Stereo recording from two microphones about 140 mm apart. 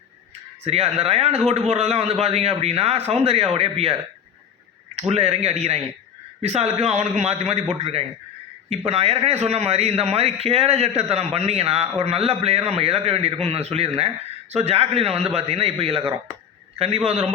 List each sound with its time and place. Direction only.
0.6 s a man's voice: 50° right (ahead or behind)
4.9 s a man's voice: 50° right (ahead or behind)